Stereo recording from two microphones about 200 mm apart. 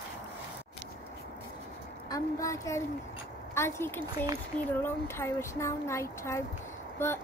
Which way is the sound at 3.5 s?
15° left (ahead or behind).